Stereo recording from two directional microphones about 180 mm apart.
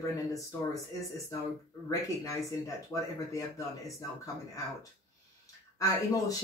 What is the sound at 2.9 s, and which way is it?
Speech, 15° left (ahead or behind).